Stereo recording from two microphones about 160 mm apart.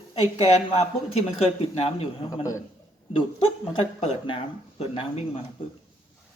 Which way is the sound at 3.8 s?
35° left (ahead or behind).